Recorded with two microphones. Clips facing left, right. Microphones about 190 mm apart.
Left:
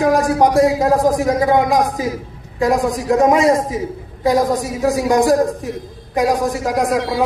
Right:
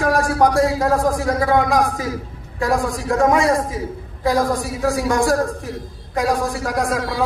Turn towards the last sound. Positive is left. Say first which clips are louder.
# left 4 dB
turn(degrees=20)  # may be behind; listen again after turning